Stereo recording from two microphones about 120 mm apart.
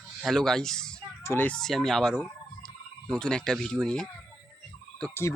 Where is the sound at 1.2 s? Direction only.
20° left (ahead or behind).